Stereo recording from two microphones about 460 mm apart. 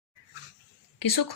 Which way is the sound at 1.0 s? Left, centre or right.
Left.